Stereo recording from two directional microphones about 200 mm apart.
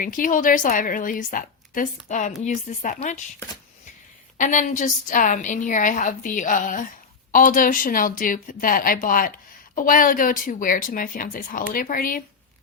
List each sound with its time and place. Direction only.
0.0 s a woman's voice: 40° left (ahead or behind)
4.4 s a woman's voice: 40° left (ahead or behind)